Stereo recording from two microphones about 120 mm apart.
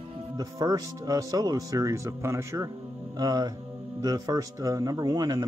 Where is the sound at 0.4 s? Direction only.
30° right (ahead or behind).